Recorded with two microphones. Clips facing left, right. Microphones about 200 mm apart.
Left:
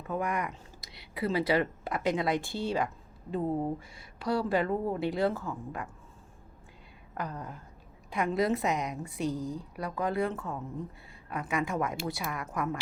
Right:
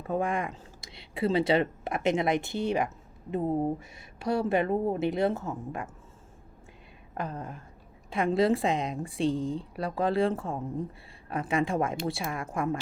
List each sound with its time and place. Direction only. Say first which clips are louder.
0.1 s speech: right 3 dB; 30° right (ahead or behind)
7.1 s a sound: right 2 dB; 25° right (ahead or behind)
8.1 s speech: right 4 dB; 30° right (ahead or behind)